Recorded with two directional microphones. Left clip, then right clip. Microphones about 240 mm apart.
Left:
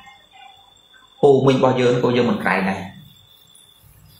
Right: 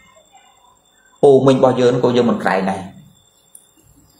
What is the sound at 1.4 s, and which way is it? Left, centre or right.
Speech, left.